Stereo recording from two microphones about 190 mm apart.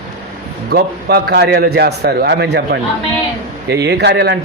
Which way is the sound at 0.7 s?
55° right (ahead or behind).